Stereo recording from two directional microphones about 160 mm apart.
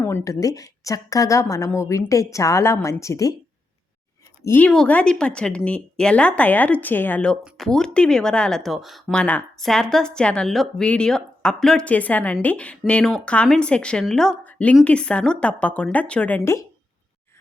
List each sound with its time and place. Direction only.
0.0 s a woman's voice: 20° left (ahead or behind)
4.4 s speech: 10° left (ahead or behind)